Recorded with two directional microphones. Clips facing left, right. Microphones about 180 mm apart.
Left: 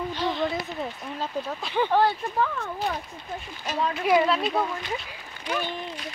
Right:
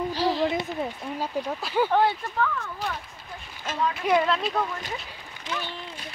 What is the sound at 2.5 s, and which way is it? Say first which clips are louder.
Speech: left 3 dB; 30° left (ahead or behind).